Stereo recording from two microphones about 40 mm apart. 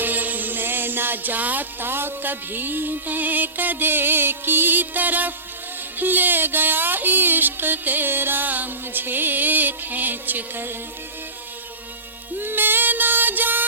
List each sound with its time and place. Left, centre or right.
0.0 s music: right
1.8 s music: right
12.4 s music: right